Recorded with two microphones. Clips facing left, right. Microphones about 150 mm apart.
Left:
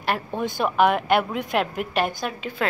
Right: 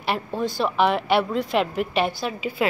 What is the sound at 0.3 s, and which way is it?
Speech, 20° left (ahead or behind).